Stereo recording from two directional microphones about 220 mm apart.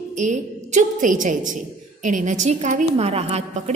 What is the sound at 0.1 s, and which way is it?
A woman's voice, 35° right (ahead or behind).